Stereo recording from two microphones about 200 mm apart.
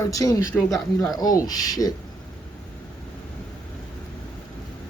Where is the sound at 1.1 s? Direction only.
20° left (ahead or behind).